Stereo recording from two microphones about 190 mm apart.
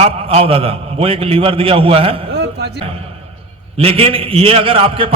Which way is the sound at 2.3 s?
60° right (ahead or behind).